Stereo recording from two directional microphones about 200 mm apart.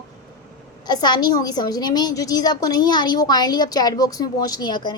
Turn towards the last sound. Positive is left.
turn(degrees=20)  # may be behind; listen again after turning